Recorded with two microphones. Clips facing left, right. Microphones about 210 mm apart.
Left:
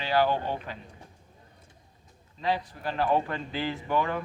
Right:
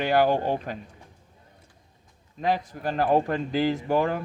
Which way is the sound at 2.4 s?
45° right (ahead or behind).